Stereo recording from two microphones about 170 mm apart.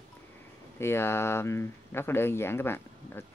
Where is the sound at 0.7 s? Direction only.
15° left (ahead or behind).